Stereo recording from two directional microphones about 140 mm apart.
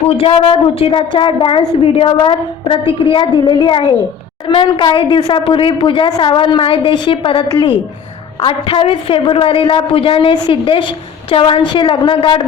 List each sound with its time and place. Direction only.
0.2 s a woman's voice: 40° left (ahead or behind)